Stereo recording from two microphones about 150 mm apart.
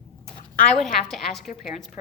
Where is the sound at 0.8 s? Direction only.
Centre (ahead or behind).